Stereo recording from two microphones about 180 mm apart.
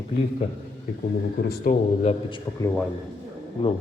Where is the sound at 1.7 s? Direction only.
50° left (ahead or behind).